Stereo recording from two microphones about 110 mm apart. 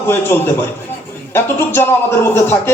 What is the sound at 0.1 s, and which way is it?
A man's voice, 25° left (ahead or behind).